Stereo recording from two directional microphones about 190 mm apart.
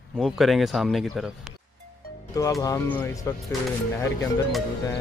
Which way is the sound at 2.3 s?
20° left (ahead or behind).